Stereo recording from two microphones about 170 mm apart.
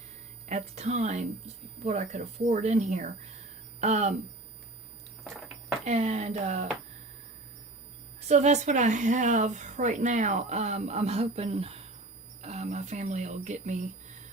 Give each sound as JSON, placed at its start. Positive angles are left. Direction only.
{"t": 0.4, "sound": "a woman's voice", "side_deg": -45}
{"t": 5.8, "sound": "speech", "side_deg": -40}
{"t": 8.3, "sound": "a woman's voice", "side_deg": -40}